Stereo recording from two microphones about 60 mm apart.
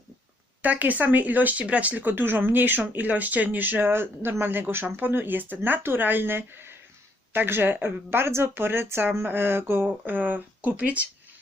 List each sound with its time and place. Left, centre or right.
0.6 s speech: right